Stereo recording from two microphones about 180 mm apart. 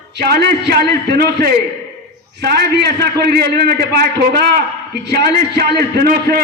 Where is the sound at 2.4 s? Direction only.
60° right (ahead or behind).